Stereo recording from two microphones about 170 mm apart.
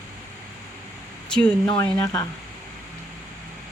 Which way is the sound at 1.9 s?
20° left (ahead or behind).